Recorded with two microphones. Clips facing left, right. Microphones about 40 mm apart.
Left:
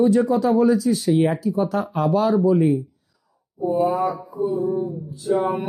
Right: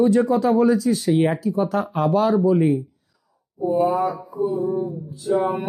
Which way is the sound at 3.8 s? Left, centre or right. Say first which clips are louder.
Even; right.